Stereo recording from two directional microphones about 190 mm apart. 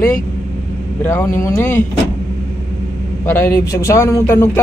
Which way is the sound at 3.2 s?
10° left (ahead or behind).